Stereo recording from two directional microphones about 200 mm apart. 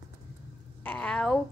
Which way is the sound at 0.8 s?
5° left (ahead or behind).